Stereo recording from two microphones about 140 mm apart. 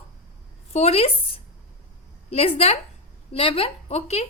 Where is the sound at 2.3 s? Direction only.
45° left (ahead or behind).